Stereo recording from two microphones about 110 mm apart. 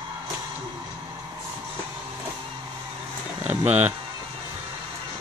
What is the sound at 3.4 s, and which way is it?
Speech, 15° right (ahead or behind).